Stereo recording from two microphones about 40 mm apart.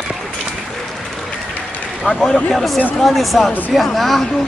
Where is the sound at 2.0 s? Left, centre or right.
Centre.